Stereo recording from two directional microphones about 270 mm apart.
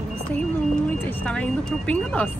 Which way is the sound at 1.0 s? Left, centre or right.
Centre.